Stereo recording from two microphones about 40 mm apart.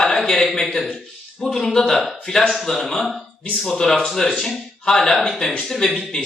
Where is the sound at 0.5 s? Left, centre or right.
Centre.